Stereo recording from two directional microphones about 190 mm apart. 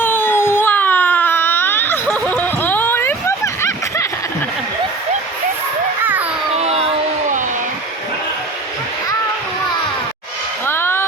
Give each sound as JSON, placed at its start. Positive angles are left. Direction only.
{"t": 0.0, "sound": "baby cry", "side_deg": 10}
{"t": 6.0, "sound": "music", "side_deg": -10}
{"t": 6.6, "sound": "a sound", "side_deg": -30}
{"t": 10.7, "sound": "music", "side_deg": 10}